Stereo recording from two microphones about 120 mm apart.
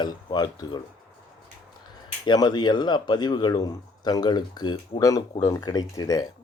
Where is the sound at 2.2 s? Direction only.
40° left (ahead or behind).